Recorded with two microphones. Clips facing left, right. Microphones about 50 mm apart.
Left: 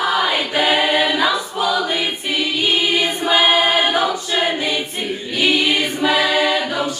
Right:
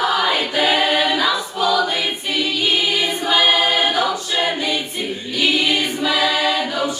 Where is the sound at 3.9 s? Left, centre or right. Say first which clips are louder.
Left 1 dB; left.